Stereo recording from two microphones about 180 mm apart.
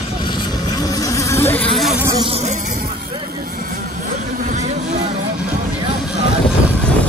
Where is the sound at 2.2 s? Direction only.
35° right (ahead or behind).